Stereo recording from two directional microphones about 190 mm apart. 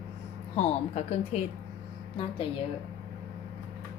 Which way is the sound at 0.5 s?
35° left (ahead or behind).